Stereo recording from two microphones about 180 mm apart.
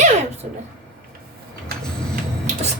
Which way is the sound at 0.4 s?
45° right (ahead or behind).